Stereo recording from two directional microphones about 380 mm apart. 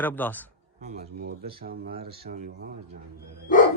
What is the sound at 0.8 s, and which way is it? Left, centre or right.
Speech, right.